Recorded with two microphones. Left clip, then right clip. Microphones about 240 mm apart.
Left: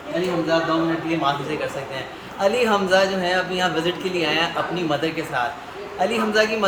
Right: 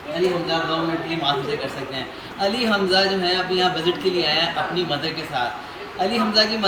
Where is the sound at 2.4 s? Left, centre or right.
Left.